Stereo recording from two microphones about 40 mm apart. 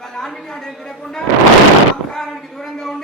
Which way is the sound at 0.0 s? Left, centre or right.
Centre.